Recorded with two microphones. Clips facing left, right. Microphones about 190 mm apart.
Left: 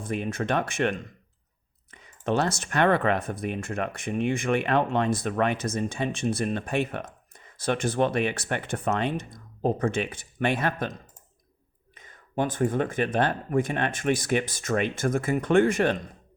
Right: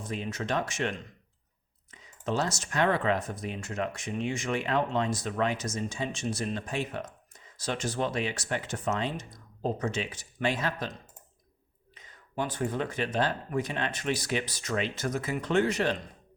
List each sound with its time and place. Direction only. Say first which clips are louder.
0.0 s speech: left 5 dB; 55° left (ahead or behind)
11.9 s speech: left 5 dB; 50° left (ahead or behind)